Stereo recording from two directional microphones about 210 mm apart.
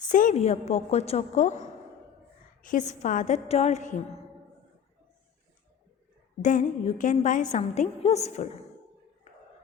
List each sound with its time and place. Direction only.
0.1 s a woman's voice: 40° left (ahead or behind)
6.4 s a woman's voice: 35° left (ahead or behind)